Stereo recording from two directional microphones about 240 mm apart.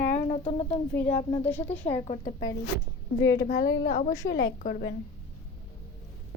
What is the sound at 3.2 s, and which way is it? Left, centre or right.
Speech, left.